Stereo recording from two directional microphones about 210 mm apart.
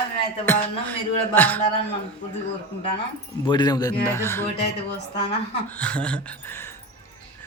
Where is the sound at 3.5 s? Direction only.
20° left (ahead or behind).